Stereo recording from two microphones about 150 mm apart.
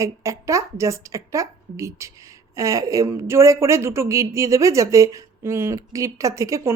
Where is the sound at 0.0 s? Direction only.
20° right (ahead or behind).